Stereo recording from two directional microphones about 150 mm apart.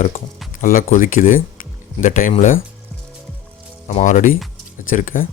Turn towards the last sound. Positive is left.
turn(degrees=65)  # may be behind; listen again after turning